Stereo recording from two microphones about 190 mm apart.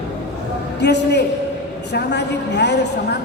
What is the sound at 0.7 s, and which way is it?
A woman's voice, 65° left (ahead or behind).